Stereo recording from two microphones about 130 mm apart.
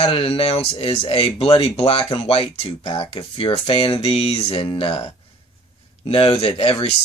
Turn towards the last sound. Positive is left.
turn(degrees=45)  # may be behind; listen again after turning